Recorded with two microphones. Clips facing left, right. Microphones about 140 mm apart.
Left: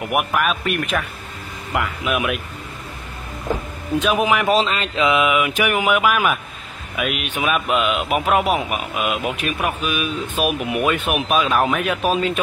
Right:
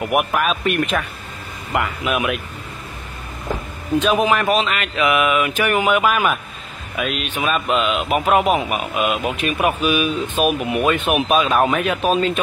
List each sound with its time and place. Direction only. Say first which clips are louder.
0.1 s a man's voice: even; centre (ahead or behind)
4.0 s speech: right 1 dB; 10° left (ahead or behind)
4.5 s a man's voice: left 1 dB; 30° left (ahead or behind); by 10.0 s 5° right (ahead or behind)
10.4 s a man's voice: right 2 dB; 10° left (ahead or behind)